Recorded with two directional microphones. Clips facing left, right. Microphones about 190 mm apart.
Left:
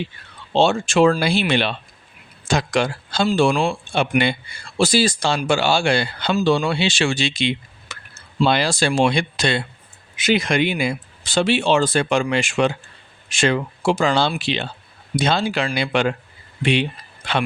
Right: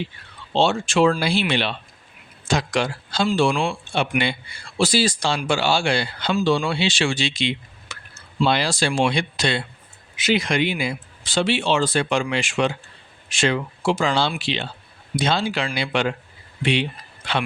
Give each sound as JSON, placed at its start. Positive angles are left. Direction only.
{"t": 0.5, "sound": "speech", "side_deg": 45}